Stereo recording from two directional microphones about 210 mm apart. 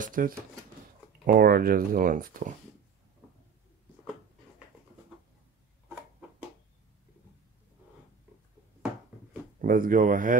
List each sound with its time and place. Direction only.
0.0 s speech: 40° right (ahead or behind)
9.6 s speech: 40° right (ahead or behind)